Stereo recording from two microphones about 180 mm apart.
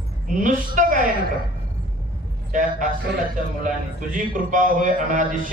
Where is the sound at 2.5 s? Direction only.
45° right (ahead or behind).